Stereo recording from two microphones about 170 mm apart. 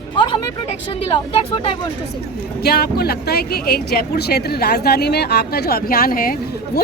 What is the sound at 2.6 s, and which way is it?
Speech, 65° left (ahead or behind).